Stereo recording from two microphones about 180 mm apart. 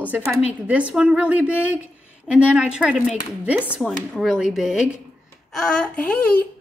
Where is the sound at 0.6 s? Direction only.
5° right (ahead or behind).